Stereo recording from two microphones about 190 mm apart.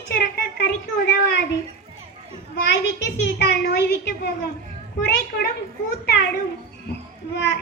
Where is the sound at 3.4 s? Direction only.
60° left (ahead or behind).